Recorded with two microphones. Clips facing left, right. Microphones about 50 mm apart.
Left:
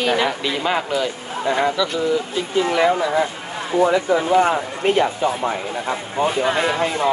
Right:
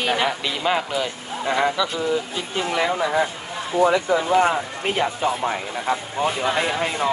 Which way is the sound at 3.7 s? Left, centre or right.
Left.